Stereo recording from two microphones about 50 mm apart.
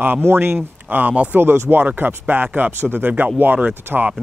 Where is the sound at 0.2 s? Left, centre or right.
Right.